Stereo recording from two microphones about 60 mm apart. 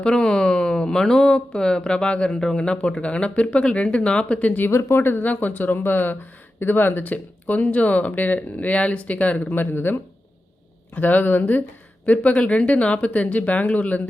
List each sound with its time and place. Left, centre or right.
0.0 s speech: centre; by 4.7 s left
4.7 s speech: left
9.6 s speech: left